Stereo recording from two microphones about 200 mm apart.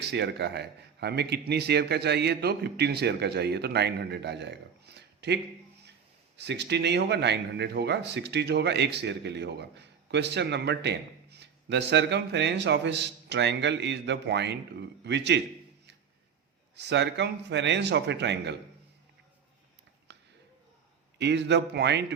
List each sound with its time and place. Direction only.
0.0 s speech: 60° right (ahead or behind)
16.7 s speech: 60° right (ahead or behind)
20.1 s a sound: 60° right (ahead or behind)
21.2 s speech: 60° right (ahead or behind)